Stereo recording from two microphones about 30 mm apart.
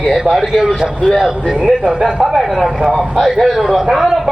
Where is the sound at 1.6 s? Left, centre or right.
Right.